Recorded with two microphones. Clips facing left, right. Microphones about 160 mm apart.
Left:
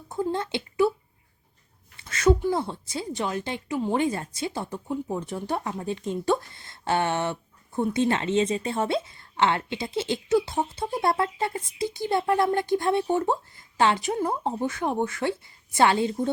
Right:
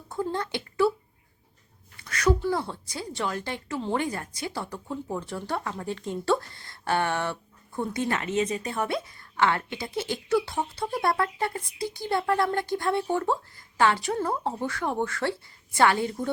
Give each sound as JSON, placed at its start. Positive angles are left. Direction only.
{"t": 0.1, "sound": "a woman's voice", "side_deg": 20}
{"t": 2.0, "sound": "speech", "side_deg": 25}